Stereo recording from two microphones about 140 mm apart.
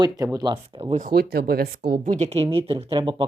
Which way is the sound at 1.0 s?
90° right.